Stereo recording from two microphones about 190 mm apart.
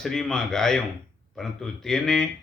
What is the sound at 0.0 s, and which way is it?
Speech, 5° left (ahead or behind).